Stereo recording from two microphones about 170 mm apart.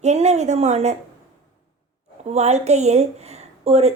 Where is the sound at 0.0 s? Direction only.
40° right (ahead or behind).